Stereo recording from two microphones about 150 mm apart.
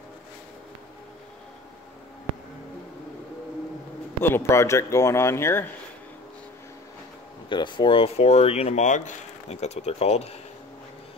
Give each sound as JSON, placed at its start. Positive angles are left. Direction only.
{"t": 4.2, "sound": "speech", "side_deg": 15}
{"t": 7.4, "sound": "speech", "side_deg": 30}